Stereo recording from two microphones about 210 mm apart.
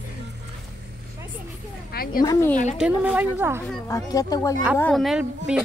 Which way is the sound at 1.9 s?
45° left (ahead or behind).